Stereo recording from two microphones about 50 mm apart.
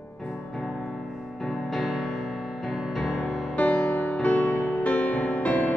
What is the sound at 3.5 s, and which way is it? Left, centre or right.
Music, left.